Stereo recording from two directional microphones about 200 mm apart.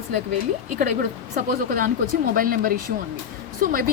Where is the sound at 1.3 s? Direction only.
45° right (ahead or behind).